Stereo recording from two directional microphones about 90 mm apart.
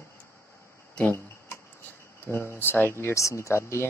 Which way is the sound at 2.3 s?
30° left (ahead or behind).